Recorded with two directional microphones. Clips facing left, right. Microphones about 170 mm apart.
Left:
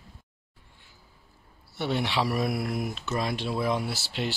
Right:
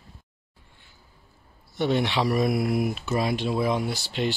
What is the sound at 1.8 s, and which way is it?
Speech, 5° left (ahead or behind).